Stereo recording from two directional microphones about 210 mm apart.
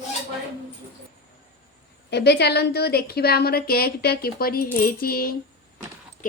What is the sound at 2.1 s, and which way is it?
A woman's voice, 50° left (ahead or behind).